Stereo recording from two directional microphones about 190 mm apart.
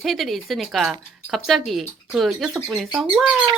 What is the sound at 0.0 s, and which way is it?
Speech, centre (ahead or behind).